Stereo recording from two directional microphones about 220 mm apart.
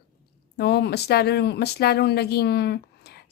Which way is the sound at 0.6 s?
50° left (ahead or behind).